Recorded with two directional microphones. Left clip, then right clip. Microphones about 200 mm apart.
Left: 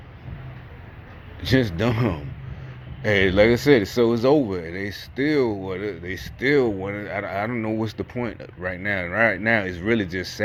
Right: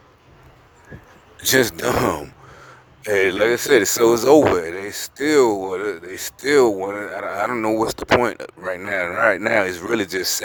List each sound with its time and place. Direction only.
1.5 s speech: 35° right (ahead or behind)